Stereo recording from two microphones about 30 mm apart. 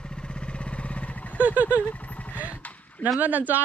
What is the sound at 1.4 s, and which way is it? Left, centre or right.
Vehicle, right.